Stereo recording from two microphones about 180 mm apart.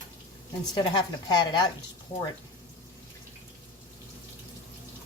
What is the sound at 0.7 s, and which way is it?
A woman's voice, 25° left (ahead or behind).